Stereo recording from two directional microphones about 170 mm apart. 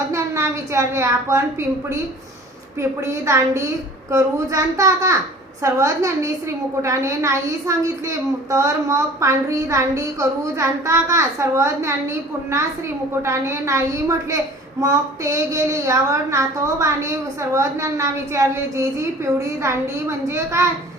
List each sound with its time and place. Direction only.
0.1 s a woman's voice: 15° right (ahead or behind)
3.0 s a woman's voice: 15° right (ahead or behind)